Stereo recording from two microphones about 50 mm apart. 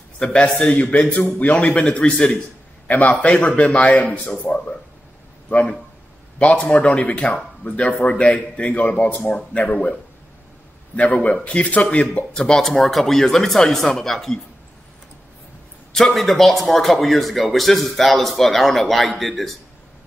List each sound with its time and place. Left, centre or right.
0.2 s speech: left
2.9 s speech: left
6.4 s speech: left
11.0 s speech: left
12.4 s speech: centre
15.9 s speech: centre